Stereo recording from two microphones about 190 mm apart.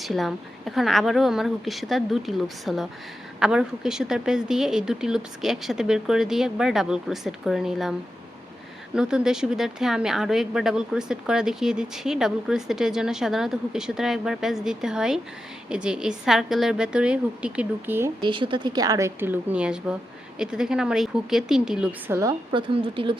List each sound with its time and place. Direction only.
0.0 s speech: centre (ahead or behind)
9.0 s speech: 5° right (ahead or behind)
18.2 s a woman's voice: 25° right (ahead or behind)